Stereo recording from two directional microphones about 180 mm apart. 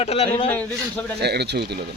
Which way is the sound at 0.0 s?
35° left (ahead or behind).